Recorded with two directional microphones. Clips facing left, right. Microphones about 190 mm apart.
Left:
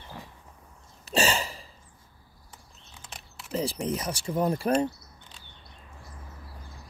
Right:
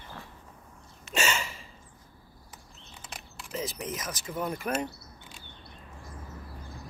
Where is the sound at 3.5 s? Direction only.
30° left (ahead or behind).